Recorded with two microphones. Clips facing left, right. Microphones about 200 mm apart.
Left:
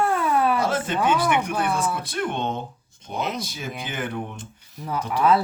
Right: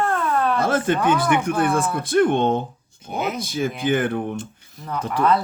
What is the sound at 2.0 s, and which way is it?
Speech, 50° right (ahead or behind).